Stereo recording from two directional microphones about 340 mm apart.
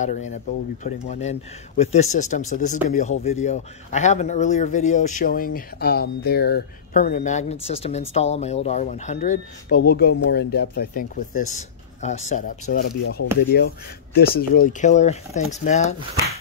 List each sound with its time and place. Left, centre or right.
0.0 s speech: left